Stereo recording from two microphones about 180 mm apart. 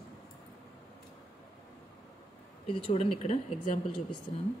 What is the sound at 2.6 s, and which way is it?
Speech, 30° left (ahead or behind).